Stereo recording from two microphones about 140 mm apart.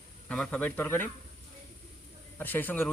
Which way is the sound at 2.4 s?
15° left (ahead or behind).